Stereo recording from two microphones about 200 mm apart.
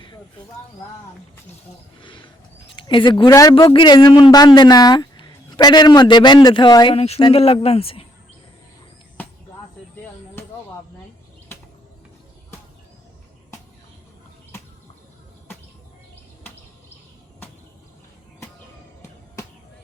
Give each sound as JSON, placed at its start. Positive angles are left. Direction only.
{"t": 2.0, "sound": "speech", "side_deg": 25}